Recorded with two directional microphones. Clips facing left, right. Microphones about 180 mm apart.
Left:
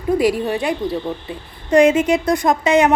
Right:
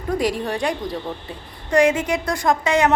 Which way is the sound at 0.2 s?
5° left (ahead or behind).